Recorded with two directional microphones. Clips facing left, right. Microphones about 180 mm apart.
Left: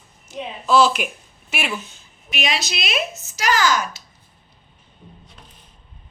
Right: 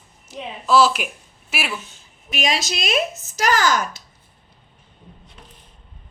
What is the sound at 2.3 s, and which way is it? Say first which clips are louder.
Speech: right 2 dB; 45° right (ahead or behind).